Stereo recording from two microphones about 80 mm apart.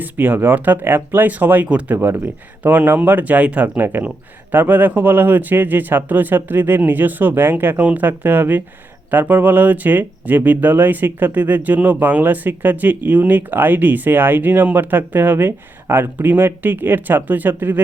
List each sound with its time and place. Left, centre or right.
0.0 s speech: right